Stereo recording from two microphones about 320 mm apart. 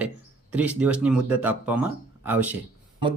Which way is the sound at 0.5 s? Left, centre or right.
Centre.